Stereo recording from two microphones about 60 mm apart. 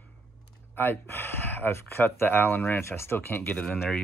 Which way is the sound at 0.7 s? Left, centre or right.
Left.